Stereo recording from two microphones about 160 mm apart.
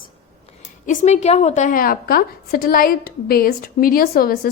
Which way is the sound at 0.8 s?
45° left (ahead or behind).